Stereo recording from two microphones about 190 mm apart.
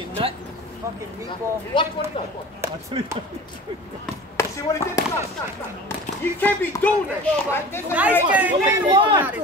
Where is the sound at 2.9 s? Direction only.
25° right (ahead or behind).